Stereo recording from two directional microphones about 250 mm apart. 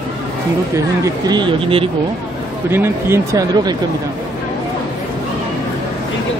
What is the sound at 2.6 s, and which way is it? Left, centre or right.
Speech, centre.